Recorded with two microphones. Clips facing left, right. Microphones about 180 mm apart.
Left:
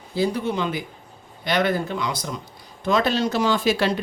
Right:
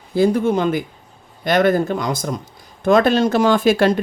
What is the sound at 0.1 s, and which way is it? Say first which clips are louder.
Speech: right 7 dB; 50° right (ahead or behind).